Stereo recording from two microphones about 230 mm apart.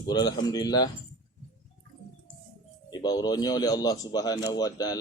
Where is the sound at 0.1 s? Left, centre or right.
Centre.